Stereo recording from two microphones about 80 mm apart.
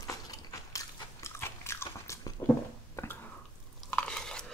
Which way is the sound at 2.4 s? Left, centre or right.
Left.